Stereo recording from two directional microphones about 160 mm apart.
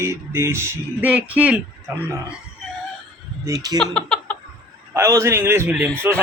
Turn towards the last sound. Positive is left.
turn(degrees=-15)  # may be behind; listen again after turning